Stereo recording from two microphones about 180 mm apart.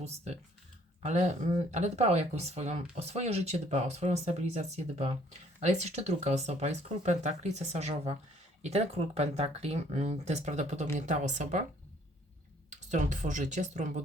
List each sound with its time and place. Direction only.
1.0 s speech: 40° right (ahead or behind)
12.7 s speech: 45° right (ahead or behind)